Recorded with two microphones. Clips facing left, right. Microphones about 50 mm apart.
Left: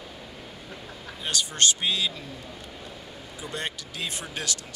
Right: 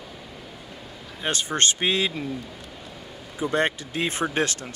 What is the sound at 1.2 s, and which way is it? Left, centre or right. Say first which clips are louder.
Speech: right 2 dB; right.